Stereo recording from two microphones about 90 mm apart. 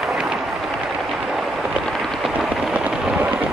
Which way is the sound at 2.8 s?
15° right (ahead or behind).